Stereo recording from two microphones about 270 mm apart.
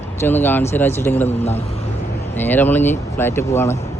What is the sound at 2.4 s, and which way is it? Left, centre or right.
Speech, centre.